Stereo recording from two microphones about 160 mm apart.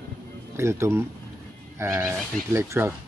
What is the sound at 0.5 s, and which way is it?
Speech, 15° right (ahead or behind).